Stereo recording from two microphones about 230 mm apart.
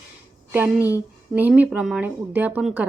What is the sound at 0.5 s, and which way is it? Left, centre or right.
A woman's voice, centre.